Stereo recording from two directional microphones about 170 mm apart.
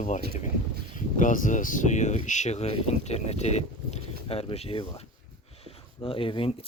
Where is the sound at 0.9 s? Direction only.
50° left (ahead or behind).